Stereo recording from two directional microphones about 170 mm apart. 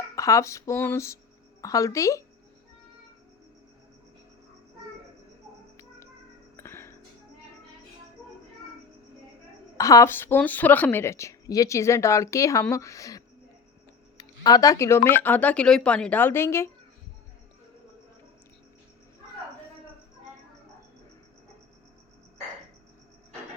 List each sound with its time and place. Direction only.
0.2 s a woman's voice: 20° left (ahead or behind)
6.6 s music: 15° left (ahead or behind)
9.7 s a woman's voice: 20° left (ahead or behind)